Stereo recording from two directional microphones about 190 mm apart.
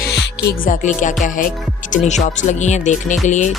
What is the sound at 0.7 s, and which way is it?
Music, 40° left (ahead or behind).